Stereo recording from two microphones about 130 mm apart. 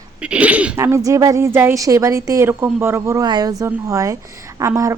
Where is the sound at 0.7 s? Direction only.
20° right (ahead or behind).